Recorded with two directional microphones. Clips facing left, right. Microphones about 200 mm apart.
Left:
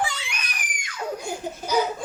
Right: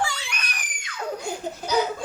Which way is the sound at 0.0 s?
10° left (ahead or behind).